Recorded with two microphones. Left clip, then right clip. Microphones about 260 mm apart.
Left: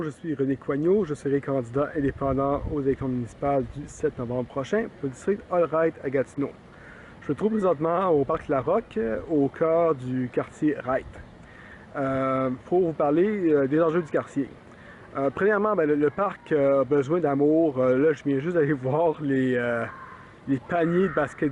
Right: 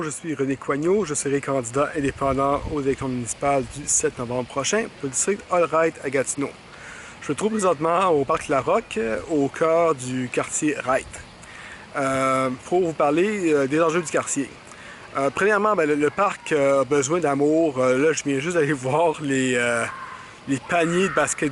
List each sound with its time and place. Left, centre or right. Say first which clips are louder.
0.0 s speech: right 2 dB; centre
7.6 s speech: right 5 dB; centre
9.2 s speech: even; left
9.6 s speech: right 4 dB; centre
12.7 s speech: right 1 dB; left
13.0 s speech: right 2 dB; centre
14.0 s speech: right 3 dB; centre
15.1 s speech: right 3 dB; centre